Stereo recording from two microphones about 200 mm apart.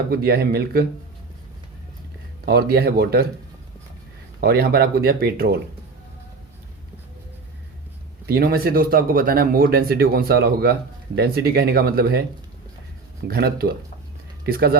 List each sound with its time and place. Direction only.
0.1 s speech: 50° right (ahead or behind)
2.4 s speech: 50° right (ahead or behind)
4.4 s speech: 50° right (ahead or behind)
8.3 s speech: 50° right (ahead or behind)
13.2 s speech: 50° right (ahead or behind)